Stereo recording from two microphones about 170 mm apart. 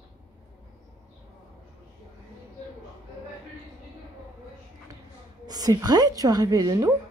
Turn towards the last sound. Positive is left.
turn(degrees=-20)  # may be behind; listen again after turning